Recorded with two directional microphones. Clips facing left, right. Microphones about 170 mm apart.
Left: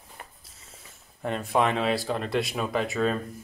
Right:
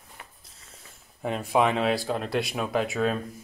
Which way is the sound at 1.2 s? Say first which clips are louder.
Right 1 dB; 5° right (ahead or behind).